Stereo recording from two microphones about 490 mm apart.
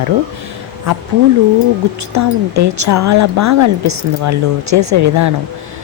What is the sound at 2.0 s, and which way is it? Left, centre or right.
Speech, right.